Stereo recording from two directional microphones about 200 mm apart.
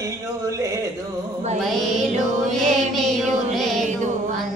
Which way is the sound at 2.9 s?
Centre (ahead or behind).